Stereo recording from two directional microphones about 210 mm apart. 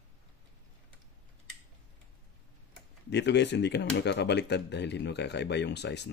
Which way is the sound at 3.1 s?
55° left (ahead or behind).